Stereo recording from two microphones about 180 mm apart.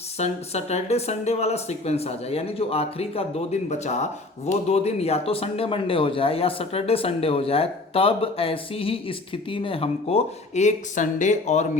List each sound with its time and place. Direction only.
0.2 s speech: 35° left (ahead or behind)